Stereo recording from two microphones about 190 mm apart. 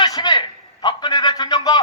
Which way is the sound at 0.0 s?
25° left (ahead or behind).